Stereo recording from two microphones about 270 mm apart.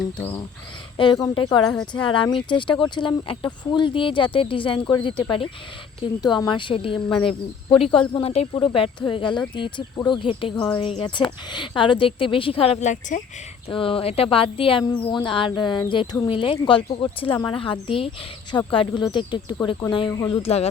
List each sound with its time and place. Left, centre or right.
0.2 s speech: centre
7.1 s speech: centre
7.7 s speech: centre